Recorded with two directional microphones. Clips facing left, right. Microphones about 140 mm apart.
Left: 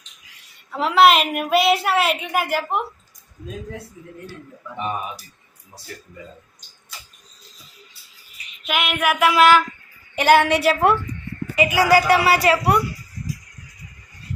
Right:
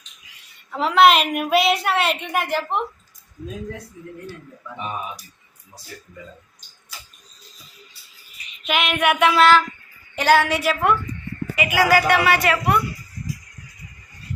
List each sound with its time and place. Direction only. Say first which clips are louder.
0.7 s a woman's voice: even; centre (ahead or behind)
8.6 s a woman's voice: right 1 dB; 5° left (ahead or behind); by 12.8 s 35° left (ahead or behind)